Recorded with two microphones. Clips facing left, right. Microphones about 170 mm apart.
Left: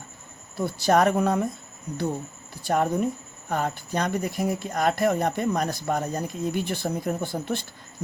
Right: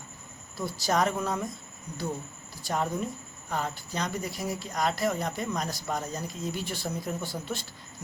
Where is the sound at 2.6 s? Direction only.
55° left (ahead or behind).